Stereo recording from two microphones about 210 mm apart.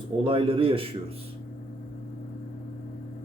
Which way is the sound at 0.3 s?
25° right (ahead or behind).